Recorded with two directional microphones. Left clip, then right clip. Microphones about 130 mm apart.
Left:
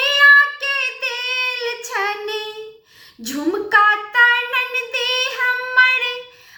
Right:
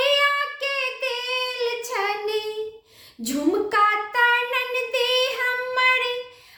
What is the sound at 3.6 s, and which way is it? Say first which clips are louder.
Child singing: left 9 dB; 45° right (ahead or behind).